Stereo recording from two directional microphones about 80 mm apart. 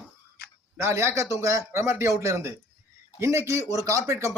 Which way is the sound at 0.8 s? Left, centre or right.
Right.